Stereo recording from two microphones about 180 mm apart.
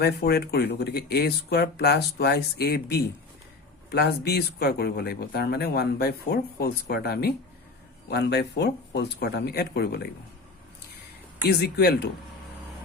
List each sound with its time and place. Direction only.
0.0 s speech: 65° left (ahead or behind)
11.4 s speech: 65° left (ahead or behind)